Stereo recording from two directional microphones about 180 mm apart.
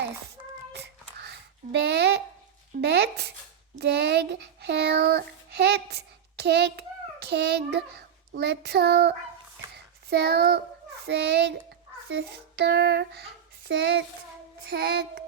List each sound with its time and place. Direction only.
1.2 s a sound: 65° right (ahead or behind)
2.8 s a child's voice: 65° right (ahead or behind)
10.1 s child singing: 65° right (ahead or behind)
11.0 s a child's voice: 70° right (ahead or behind)
12.5 s child singing: 65° right (ahead or behind)
13.7 s a child's voice: 65° right (ahead or behind)
14.7 s child singing: 60° right (ahead or behind)